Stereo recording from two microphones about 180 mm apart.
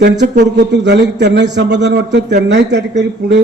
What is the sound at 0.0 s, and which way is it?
A man's voice, 70° right (ahead or behind).